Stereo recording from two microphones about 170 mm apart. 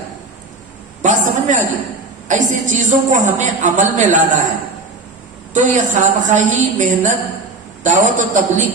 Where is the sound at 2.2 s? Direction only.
45° right (ahead or behind).